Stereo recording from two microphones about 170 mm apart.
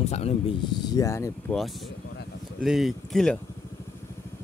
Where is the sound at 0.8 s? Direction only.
20° left (ahead or behind).